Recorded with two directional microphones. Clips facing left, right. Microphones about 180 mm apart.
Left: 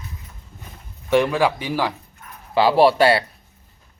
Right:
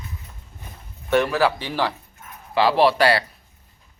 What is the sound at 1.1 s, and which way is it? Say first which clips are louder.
Speech: left 1 dB; 15° left (ahead or behind).